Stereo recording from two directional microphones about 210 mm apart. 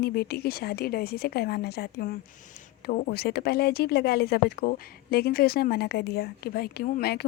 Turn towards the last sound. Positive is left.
turn(degrees=45)  # may be behind; listen again after turning